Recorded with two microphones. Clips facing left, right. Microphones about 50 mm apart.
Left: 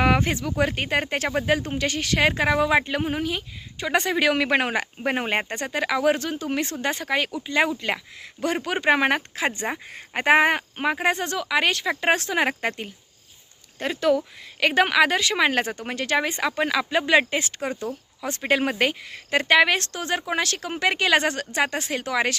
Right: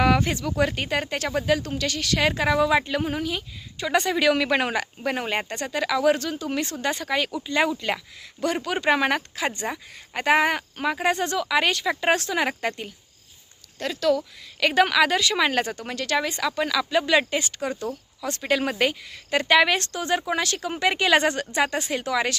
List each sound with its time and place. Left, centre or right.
0.0 s speech: centre
9.7 s speech: left
13.7 s speech: left
14.2 s speech: centre